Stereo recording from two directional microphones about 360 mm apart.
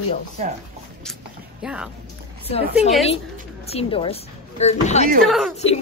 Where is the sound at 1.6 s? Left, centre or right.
Centre.